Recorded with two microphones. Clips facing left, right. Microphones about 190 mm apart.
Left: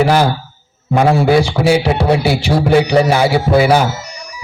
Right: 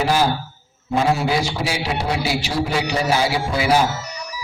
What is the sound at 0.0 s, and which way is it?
A man's voice, 65° left (ahead or behind).